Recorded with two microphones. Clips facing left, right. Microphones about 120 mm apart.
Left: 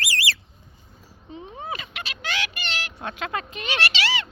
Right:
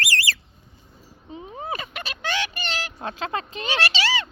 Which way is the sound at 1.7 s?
45° right (ahead or behind).